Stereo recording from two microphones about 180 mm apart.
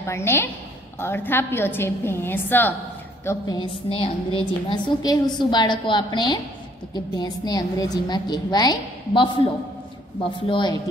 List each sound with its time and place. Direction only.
0.0 s a woman's voice: 15° left (ahead or behind)
3.3 s a woman's voice: 20° left (ahead or behind)
10.5 s a woman's voice: 25° left (ahead or behind)